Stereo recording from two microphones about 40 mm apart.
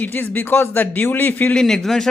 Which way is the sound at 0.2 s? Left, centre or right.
Left.